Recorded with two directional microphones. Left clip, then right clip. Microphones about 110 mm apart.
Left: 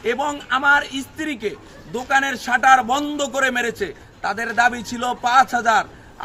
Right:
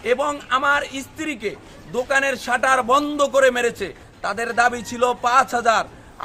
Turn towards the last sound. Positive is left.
turn(degrees=-30)  # may be behind; listen again after turning